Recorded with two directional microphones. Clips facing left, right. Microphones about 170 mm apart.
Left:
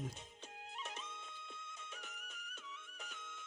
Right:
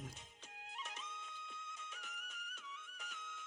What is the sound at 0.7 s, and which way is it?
Music, 25° left (ahead or behind).